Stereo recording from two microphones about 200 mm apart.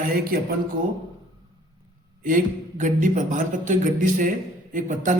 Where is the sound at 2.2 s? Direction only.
40° right (ahead or behind).